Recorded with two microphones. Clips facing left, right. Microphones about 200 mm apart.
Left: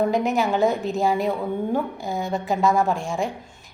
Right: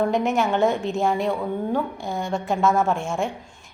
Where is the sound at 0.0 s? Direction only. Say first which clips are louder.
Even; centre (ahead or behind).